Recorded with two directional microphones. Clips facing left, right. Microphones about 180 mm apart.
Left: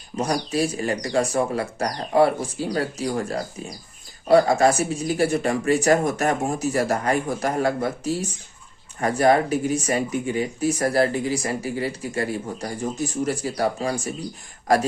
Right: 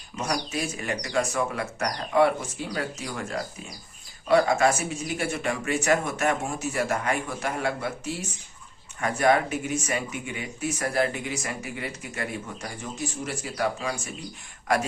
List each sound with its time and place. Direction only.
0.2 s speech: 35° left (ahead or behind)